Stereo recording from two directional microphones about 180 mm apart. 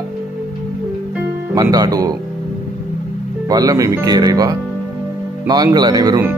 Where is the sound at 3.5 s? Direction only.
20° right (ahead or behind).